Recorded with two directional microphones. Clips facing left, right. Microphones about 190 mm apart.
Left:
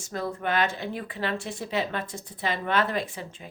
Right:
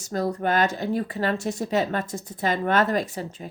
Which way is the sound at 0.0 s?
40° right (ahead or behind).